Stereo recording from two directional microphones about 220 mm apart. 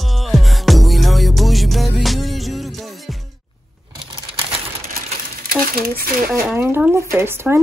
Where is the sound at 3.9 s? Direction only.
20° right (ahead or behind).